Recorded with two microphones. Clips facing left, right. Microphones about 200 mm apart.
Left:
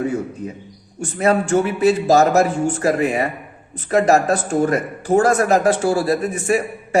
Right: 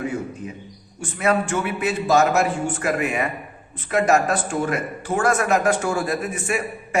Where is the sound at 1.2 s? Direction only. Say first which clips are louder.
Left 5 dB; 40° left (ahead or behind).